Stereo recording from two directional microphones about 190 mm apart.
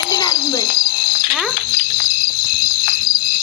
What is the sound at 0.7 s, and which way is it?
Fire alarm, 50° left (ahead or behind).